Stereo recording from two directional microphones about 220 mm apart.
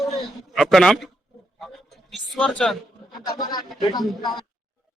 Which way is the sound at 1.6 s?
Centre (ahead or behind).